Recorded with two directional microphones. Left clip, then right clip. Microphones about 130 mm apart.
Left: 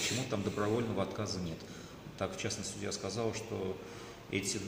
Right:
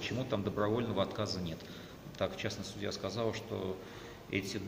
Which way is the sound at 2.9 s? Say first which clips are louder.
Right 1 dB; centre (ahead or behind).